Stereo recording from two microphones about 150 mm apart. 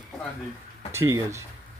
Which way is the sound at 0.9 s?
20° right (ahead or behind).